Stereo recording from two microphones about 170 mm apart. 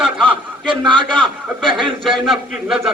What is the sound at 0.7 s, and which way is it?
Speech, 30° right (ahead or behind).